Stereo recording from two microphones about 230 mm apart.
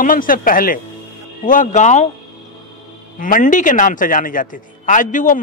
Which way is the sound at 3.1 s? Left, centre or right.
Left.